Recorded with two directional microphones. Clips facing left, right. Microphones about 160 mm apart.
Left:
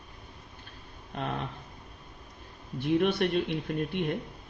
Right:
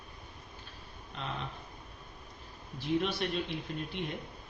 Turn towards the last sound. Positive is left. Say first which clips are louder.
# left 7 dB
turn(degrees=60)  # may be behind; listen again after turning